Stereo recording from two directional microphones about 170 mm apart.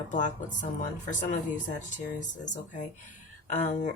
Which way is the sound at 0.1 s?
50° left (ahead or behind).